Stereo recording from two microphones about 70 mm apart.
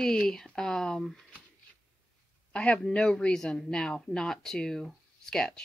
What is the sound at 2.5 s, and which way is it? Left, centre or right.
Speech, centre.